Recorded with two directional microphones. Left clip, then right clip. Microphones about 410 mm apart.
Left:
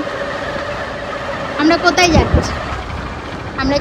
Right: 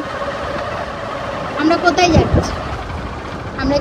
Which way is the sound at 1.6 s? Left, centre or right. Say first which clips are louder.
Left 1 dB; centre.